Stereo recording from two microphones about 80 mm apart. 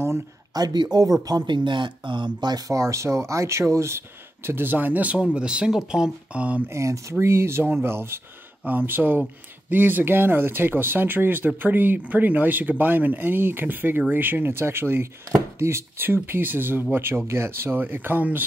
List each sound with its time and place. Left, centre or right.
0.5 s speech: right
2.7 s speech: right; by 6.6 s centre
6.7 s speech: right